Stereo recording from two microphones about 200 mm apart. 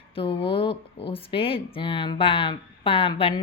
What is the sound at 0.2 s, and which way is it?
Speech, 25° left (ahead or behind).